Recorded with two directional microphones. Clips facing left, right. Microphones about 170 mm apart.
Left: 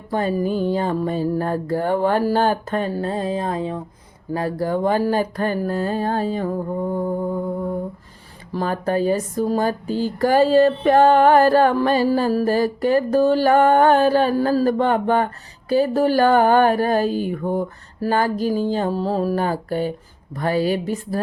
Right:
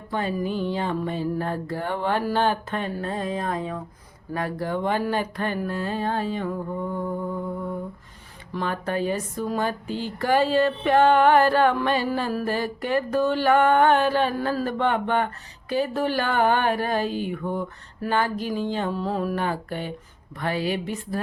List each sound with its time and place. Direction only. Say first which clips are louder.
0.1 s speech: left 6 dB; 40° left (ahead or behind)
8.5 s speech: left 5 dB; 40° left (ahead or behind)